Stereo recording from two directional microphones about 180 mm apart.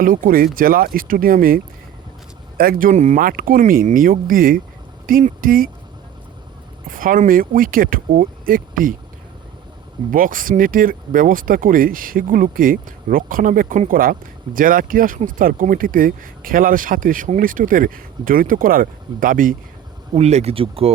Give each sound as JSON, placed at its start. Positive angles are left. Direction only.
{"t": 0.0, "sound": "speech", "side_deg": -50}
{"t": 6.8, "sound": "speech", "side_deg": -50}
{"t": 10.1, "sound": "speech", "side_deg": -50}
{"t": 20.1, "sound": "speech", "side_deg": -35}